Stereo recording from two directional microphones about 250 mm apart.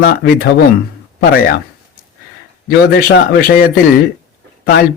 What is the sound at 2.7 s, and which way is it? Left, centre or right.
Speech, left.